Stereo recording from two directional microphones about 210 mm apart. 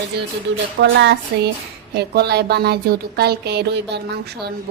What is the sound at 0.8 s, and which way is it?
A woman's voice, 55° right (ahead or behind).